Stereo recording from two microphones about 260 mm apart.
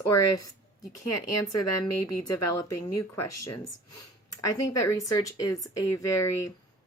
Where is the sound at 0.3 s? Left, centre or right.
Centre.